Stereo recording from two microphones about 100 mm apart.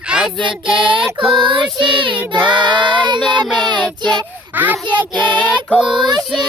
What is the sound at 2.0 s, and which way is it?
Child singing, 55° right (ahead or behind).